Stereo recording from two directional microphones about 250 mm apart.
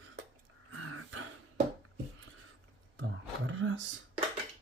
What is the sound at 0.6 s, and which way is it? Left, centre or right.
Throat clearing, right.